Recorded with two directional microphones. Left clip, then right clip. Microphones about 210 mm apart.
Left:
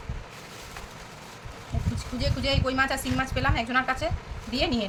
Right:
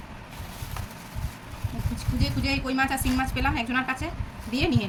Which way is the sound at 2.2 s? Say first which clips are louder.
Left 1 dB; 20° left (ahead or behind).